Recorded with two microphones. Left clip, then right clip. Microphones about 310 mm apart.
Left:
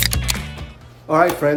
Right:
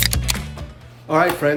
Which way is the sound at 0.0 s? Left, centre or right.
Centre.